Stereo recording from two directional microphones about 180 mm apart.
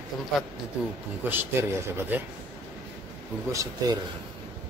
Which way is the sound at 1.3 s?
15° right (ahead or behind).